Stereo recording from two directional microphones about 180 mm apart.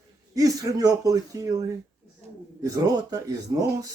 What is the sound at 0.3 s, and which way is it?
Speech, 20° right (ahead or behind).